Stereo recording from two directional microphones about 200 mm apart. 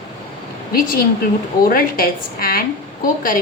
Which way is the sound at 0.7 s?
45° left (ahead or behind).